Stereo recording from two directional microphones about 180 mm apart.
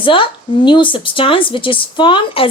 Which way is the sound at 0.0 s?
30° left (ahead or behind).